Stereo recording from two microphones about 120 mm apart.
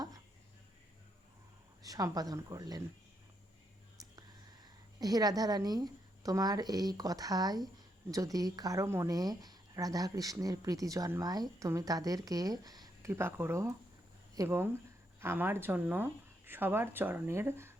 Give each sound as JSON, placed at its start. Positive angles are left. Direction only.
{"t": 1.8, "sound": "speech", "side_deg": -30}
{"t": 4.6, "sound": "speech", "side_deg": -30}
{"t": 13.1, "sound": "speech", "side_deg": -20}